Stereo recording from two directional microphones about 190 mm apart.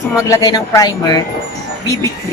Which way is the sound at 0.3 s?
20° left (ahead or behind).